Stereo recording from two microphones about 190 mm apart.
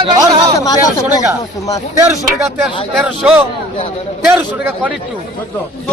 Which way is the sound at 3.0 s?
5° right (ahead or behind).